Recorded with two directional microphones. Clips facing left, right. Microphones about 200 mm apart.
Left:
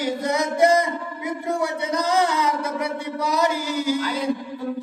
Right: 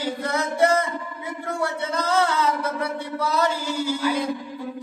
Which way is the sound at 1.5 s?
15° left (ahead or behind).